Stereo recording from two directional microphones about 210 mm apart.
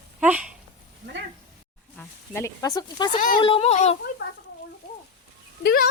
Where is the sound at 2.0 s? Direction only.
10° left (ahead or behind); by 3.9 s 30° left (ahead or behind).